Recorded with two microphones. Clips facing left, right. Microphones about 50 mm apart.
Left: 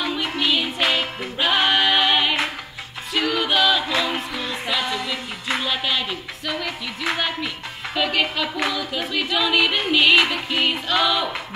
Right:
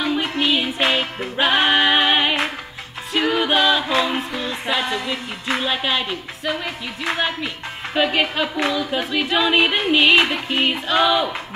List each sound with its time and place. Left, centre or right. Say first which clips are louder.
0.4 s music: right 1 dB; right
4.7 s speech: right 1 dB; right
7.9 s speech: right 3 dB; right